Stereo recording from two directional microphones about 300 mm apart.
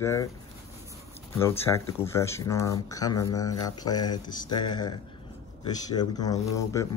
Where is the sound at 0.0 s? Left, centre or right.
Centre.